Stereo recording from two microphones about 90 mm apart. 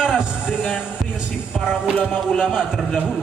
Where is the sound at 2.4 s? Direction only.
5° right (ahead or behind).